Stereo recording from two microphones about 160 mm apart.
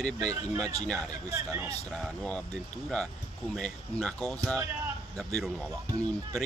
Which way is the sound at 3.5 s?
5° left (ahead or behind).